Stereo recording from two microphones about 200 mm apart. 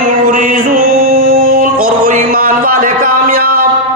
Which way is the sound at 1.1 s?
50° right (ahead or behind).